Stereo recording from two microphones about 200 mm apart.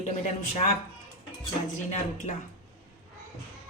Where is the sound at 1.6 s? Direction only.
40° left (ahead or behind).